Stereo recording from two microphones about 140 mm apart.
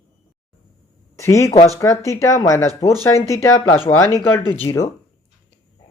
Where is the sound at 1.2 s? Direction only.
20° left (ahead or behind).